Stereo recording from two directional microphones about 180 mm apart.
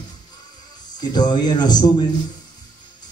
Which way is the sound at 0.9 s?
25° left (ahead or behind).